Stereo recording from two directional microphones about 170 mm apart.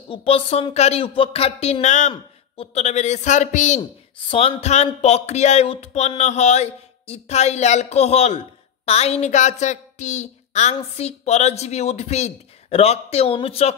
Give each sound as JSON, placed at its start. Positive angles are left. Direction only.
{"t": 0.1, "sound": "a woman's voice", "side_deg": 35}